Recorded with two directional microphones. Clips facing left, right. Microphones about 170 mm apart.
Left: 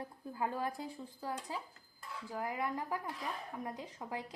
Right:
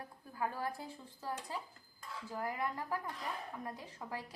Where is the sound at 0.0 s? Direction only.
20° left (ahead or behind).